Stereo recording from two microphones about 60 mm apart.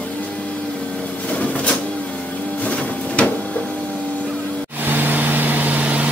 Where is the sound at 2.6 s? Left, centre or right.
Centre.